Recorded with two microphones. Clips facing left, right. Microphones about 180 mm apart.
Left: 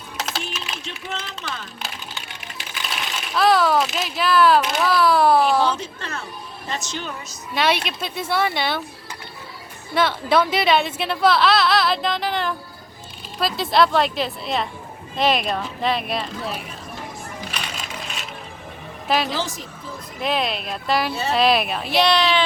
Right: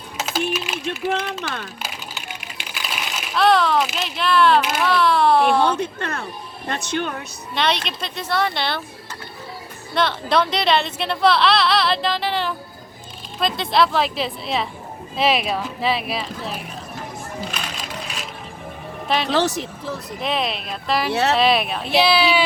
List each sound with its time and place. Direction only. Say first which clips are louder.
0.5 s a sound: right 7 dB; 5° right (ahead or behind)
0.9 s speech: right 9 dB; 55° right (ahead or behind)
2.6 s speech: even; centre (ahead or behind)
5.6 s speech: right 3 dB; 55° right (ahead or behind)
7.5 s speech: left 1 dB; 5° left (ahead or behind)
9.9 s speech: left 1 dB; 5° left (ahead or behind)
17.5 s a sound: right 1 dB; centre (ahead or behind)
19.0 s speech: left 1 dB; centre (ahead or behind)
19.3 s speech: right 7 dB; 70° right (ahead or behind)
20.2 s speech: left 1 dB; centre (ahead or behind)
21.1 s speech: right 6 dB; 70° right (ahead or behind)
21.3 s speech: even; centre (ahead or behind)